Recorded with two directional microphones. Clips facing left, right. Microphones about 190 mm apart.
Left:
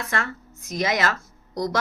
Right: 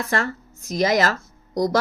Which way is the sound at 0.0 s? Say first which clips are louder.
Right 4 dB; 35° right (ahead or behind).